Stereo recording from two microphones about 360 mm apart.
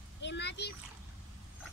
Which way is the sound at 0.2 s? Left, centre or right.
Left.